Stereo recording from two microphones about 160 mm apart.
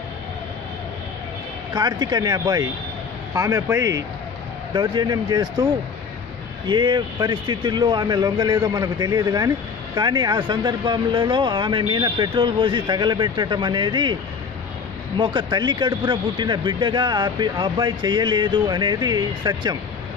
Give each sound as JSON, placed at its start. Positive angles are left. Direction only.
{"t": 1.7, "sound": "speech", "side_deg": -25}
{"t": 6.7, "sound": "speech", "side_deg": -30}
{"t": 15.1, "sound": "speech", "side_deg": -30}